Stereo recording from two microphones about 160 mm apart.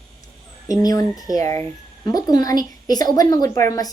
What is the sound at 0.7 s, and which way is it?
A woman's voice, 25° left (ahead or behind).